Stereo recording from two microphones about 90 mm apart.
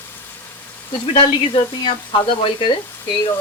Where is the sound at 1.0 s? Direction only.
80° left.